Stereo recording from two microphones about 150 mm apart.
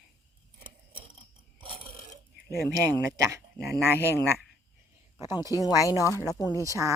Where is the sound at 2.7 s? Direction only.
20° right (ahead or behind).